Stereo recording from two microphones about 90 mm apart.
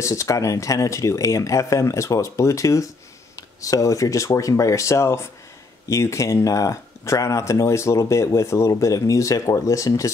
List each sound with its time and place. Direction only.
0.0 s speech: 35° left (ahead or behind)